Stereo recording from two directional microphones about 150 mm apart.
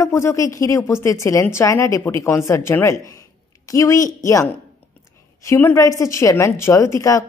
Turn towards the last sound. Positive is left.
turn(degrees=20)  # may be behind; listen again after turning